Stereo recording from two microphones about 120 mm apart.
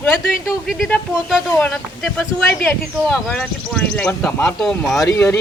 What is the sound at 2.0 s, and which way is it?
Speech, centre (ahead or behind).